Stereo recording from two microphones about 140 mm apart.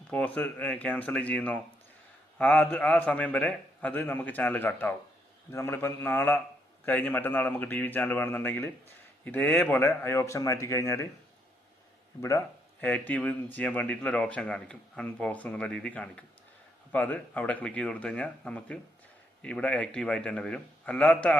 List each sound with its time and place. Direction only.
0.1 s speech: 10° left (ahead or behind)
12.8 s speech: 10° left (ahead or behind)